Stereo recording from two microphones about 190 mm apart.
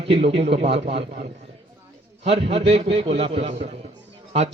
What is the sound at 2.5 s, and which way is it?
A man's voice, 30° right (ahead or behind).